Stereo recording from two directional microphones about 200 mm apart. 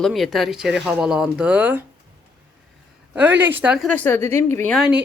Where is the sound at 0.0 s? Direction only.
Centre (ahead or behind).